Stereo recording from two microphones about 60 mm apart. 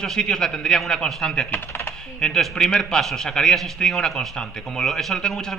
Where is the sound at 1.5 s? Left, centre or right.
Left.